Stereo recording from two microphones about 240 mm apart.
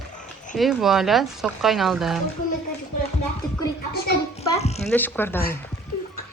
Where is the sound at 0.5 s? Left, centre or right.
Centre.